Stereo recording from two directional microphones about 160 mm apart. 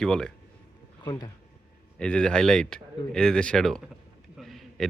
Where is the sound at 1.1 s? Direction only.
20° left (ahead or behind).